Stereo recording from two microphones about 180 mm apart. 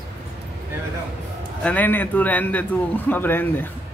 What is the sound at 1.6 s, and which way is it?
A man's voice, 10° left (ahead or behind).